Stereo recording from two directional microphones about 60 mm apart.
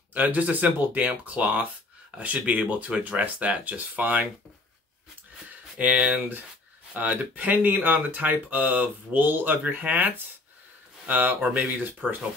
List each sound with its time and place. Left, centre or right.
0.1 s speech: right
5.8 s speech: right